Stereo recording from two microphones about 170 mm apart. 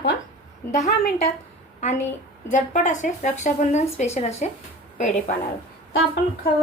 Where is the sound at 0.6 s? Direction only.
15° left (ahead or behind).